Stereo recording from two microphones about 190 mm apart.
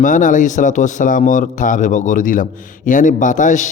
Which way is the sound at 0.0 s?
40° left (ahead or behind).